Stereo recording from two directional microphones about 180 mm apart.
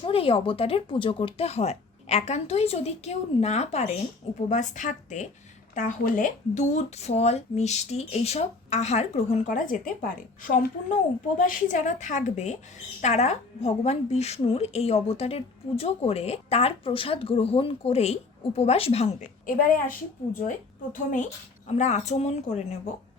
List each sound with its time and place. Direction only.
0.0 s speech: 30° left (ahead or behind)
19.5 s a woman's voice: 50° left (ahead or behind)
21.7 s speech: 40° left (ahead or behind)